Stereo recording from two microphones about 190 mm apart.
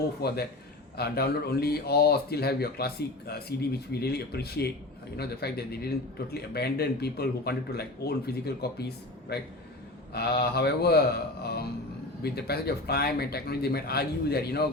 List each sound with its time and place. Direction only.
0.2 s speech: 55° left (ahead or behind)
12.2 s speech: 55° left (ahead or behind)